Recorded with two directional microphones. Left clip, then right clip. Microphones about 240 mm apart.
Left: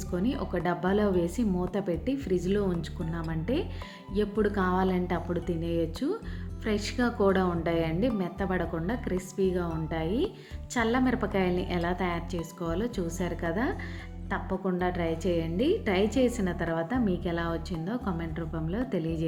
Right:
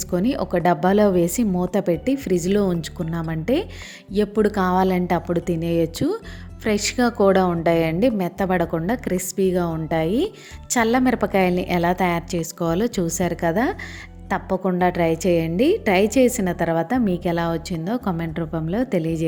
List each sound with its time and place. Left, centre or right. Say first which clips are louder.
0.1 s a woman's voice: right 9 dB; right